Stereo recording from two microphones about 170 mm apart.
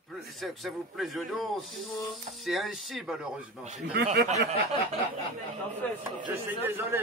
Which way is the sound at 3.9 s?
70° right (ahead or behind).